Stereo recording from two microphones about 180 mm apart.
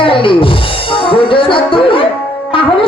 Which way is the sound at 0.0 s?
30° left (ahead or behind).